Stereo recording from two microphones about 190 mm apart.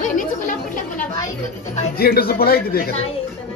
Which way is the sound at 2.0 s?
55° left (ahead or behind).